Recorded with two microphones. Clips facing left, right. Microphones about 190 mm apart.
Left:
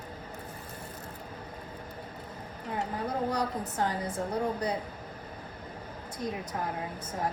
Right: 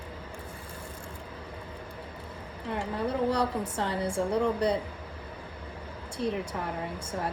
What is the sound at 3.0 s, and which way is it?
Speech, 30° right (ahead or behind).